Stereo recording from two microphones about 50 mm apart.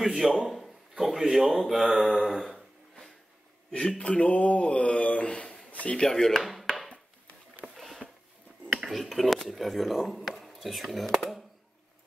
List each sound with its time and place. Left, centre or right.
0.0 s speech: centre
4.0 s speech: left
5.7 s a sound: left
5.9 s speech: centre
7.6 s a sound: centre
8.7 s speech: centre